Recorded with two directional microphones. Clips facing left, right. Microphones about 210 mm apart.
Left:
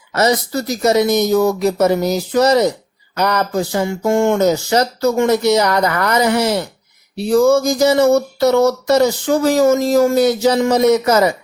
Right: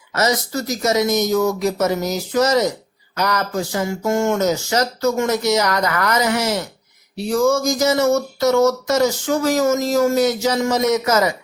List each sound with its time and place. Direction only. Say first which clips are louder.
0.1 s speech: left 4 dB; 30° left (ahead or behind)